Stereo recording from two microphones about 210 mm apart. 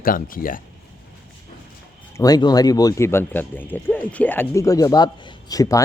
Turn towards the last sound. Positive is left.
turn(degrees=15)  # may be behind; listen again after turning